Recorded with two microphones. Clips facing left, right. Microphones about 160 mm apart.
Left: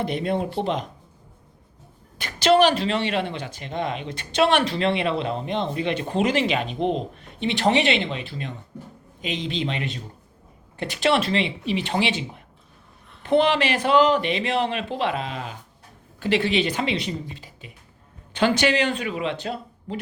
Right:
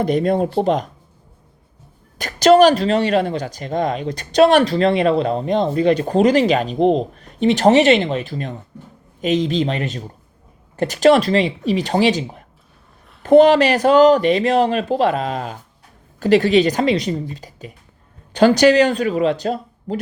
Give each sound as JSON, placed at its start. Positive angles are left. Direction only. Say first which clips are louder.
{"t": 0.0, "sound": "speech", "louder": "right 7 dB", "side_deg": -40}
{"t": 2.1, "sound": "speech", "louder": "right 7 dB", "side_deg": -40}